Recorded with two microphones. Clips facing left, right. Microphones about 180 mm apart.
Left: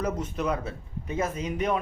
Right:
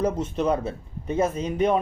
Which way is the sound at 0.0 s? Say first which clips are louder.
Right 5 dB; 30° right (ahead or behind).